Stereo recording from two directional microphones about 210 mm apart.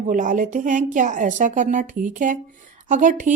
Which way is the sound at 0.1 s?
40° right (ahead or behind).